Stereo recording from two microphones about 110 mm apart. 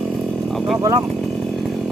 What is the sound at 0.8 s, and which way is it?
Speech, 30° right (ahead or behind).